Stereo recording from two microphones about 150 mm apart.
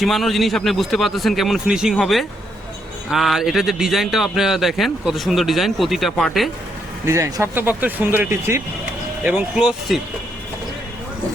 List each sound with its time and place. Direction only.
0.0 s speech: centre (ahead or behind)
7.0 s speech: 20° right (ahead or behind)